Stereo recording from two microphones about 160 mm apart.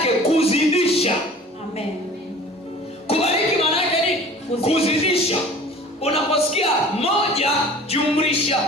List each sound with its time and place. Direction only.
0.0 s music: 40° left (ahead or behind)
3.1 s a sound: 40° left (ahead or behind)
6.0 s music: 40° left (ahead or behind)